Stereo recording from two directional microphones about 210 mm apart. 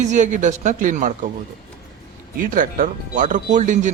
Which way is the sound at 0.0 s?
35° right (ahead or behind).